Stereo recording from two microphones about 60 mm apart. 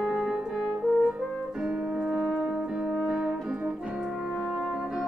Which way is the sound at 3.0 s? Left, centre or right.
Centre.